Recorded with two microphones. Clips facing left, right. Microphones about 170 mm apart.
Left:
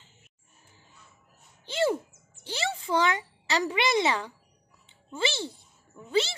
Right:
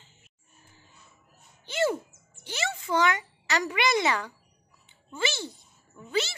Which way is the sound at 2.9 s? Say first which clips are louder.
Right 1 dB; 30° left (ahead or behind).